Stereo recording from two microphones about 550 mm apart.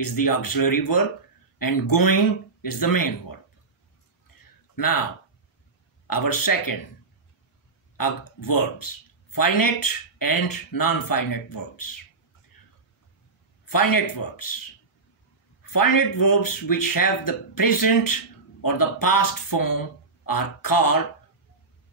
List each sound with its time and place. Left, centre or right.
0.0 s speech: left
4.7 s speech: left
6.0 s speech: left
8.0 s speech: left
13.7 s speech: left
15.6 s speech: left